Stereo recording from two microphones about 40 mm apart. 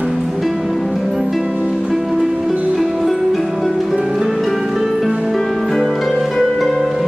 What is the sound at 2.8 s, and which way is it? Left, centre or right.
Music, centre.